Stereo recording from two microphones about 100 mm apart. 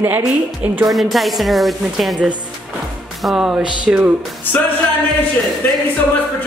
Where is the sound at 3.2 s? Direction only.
5° right (ahead or behind).